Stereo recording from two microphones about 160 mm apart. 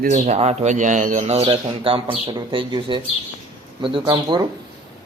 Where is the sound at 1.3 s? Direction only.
35° right (ahead or behind).